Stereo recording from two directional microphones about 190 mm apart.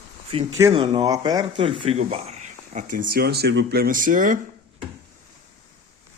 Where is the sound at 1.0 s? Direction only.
20° right (ahead or behind); by 4.4 s 45° right (ahead or behind).